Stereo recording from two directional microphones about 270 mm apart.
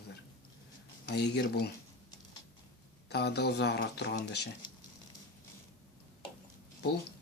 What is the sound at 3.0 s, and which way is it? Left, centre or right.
Speech, left.